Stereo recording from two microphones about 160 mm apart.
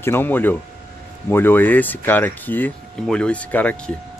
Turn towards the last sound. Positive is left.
turn(degrees=10)  # may be behind; listen again after turning